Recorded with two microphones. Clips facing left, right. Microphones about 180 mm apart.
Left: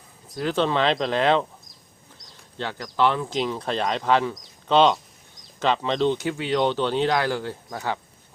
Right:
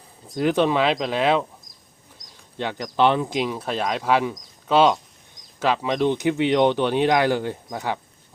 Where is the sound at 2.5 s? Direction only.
20° right (ahead or behind).